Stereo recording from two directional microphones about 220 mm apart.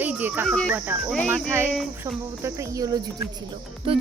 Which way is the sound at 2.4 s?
15° right (ahead or behind).